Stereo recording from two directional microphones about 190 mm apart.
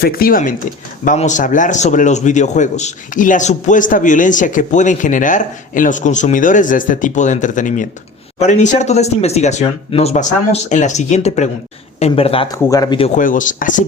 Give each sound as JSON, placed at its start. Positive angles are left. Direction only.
{"t": 0.0, "sound": "a man's voice", "side_deg": 50}
{"t": 12.6, "sound": "speech", "side_deg": 20}
{"t": 13.1, "sound": "speech", "side_deg": 45}